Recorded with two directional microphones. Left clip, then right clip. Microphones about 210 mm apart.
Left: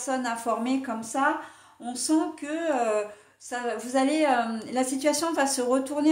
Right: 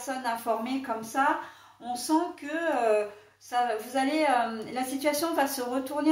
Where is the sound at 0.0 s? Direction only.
45° left (ahead or behind).